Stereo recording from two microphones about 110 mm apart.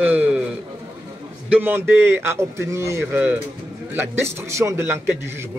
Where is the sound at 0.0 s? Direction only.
15° right (ahead or behind).